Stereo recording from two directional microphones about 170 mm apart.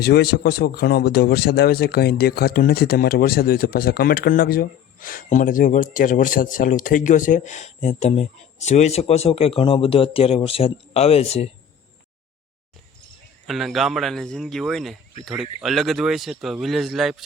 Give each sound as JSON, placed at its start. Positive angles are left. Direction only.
{"t": 0.0, "sound": "speech", "side_deg": 70}
{"t": 13.5, "sound": "speech", "side_deg": 0}